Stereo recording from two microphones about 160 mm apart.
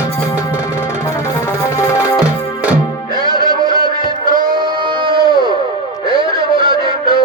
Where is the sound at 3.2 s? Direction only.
25° right (ahead or behind).